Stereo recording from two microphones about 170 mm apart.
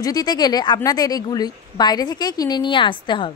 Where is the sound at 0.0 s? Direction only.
25° left (ahead or behind).